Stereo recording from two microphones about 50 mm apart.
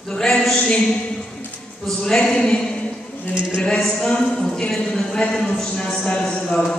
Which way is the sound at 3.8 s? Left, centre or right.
Centre.